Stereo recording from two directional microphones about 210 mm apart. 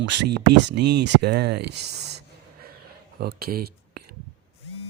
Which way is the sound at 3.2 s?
45° right (ahead or behind).